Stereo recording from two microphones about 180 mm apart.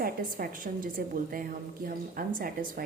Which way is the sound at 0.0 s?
50° right (ahead or behind).